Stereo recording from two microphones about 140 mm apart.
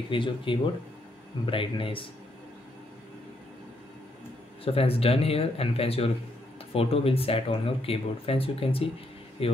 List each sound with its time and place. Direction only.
0.1 s speech: 35° left (ahead or behind)
4.6 s speech: 45° left (ahead or behind)